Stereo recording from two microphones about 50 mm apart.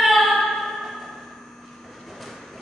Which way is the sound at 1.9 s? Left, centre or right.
Centre.